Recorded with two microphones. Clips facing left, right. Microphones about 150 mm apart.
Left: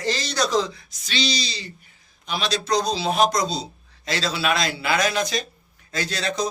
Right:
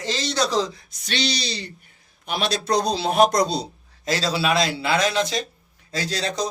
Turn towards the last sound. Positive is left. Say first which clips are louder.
# even
turn(degrees=-35)  # may be behind; listen again after turning